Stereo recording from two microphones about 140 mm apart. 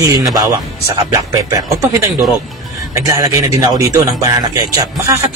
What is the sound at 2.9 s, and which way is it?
Speech, 20° right (ahead or behind).